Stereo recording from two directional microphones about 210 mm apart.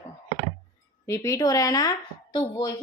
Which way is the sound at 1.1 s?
15° left (ahead or behind).